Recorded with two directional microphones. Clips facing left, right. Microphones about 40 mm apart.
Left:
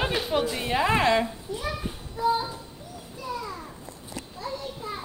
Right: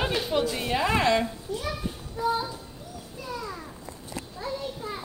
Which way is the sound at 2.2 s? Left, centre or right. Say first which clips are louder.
Left 2 dB; centre.